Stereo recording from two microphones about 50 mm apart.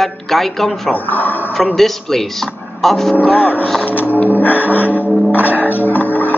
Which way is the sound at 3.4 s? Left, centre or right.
Left.